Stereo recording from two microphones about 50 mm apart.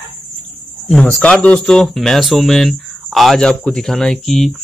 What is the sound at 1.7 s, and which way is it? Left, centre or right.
Speech, centre.